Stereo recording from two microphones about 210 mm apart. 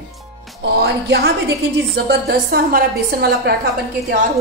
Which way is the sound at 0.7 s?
50° right (ahead or behind).